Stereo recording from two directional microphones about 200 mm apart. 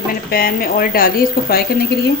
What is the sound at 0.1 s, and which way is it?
A woman's voice, 50° left (ahead or behind).